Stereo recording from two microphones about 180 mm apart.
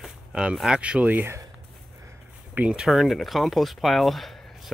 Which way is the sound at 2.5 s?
5° right (ahead or behind).